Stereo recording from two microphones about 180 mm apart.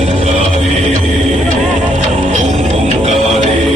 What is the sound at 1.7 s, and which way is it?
Music, 40° right (ahead or behind).